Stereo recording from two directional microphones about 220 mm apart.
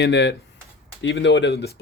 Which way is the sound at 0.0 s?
50° left (ahead or behind).